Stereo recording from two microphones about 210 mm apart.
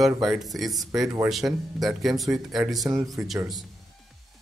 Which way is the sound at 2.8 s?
15° right (ahead or behind).